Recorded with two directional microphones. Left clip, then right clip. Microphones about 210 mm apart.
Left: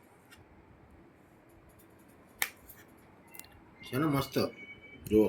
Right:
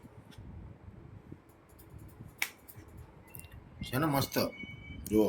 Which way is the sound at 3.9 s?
50° right (ahead or behind).